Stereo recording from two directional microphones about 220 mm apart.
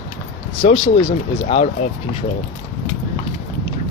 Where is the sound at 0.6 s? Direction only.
25° left (ahead or behind).